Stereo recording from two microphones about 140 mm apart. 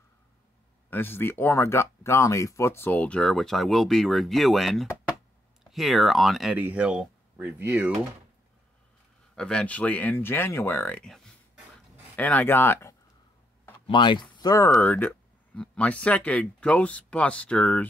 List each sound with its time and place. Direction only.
0.8 s speech: 15° left (ahead or behind); by 6.5 s centre (ahead or behind)
6.5 s speech: 10° right (ahead or behind)
9.3 s speech: 5° left (ahead or behind)
13.8 s speech: 35° left (ahead or behind)
14.4 s speech: 25° left (ahead or behind)
14.8 s speech: 10° left (ahead or behind)